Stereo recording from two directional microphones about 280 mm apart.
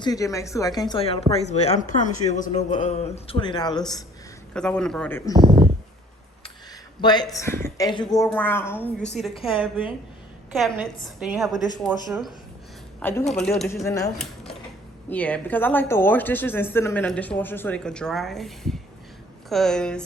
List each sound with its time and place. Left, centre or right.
0.0 s speech: centre
4.5 s a woman's voice: centre
5.3 s speech: centre
7.0 s speech: centre
9.3 s a woman's voice: centre
10.5 s a woman's voice: centre
13.0 s speech: centre
15.1 s a woman's voice: centre